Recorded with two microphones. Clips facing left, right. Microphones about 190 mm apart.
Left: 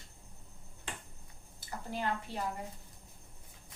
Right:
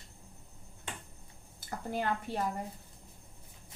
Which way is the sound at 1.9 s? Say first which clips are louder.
Right 3 dB; 50° right (ahead or behind).